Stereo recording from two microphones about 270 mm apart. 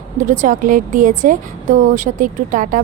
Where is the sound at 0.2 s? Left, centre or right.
Right.